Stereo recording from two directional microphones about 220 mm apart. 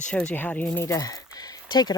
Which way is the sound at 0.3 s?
5° left (ahead or behind).